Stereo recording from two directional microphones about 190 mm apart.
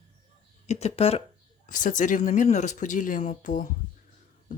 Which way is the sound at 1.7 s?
45° left (ahead or behind).